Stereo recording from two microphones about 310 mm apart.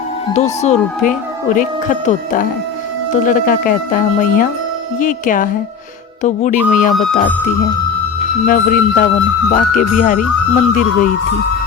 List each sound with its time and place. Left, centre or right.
0.3 s speech: left
8.4 s speech: left